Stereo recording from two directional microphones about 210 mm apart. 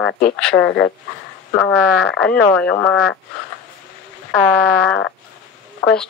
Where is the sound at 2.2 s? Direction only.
5° left (ahead or behind).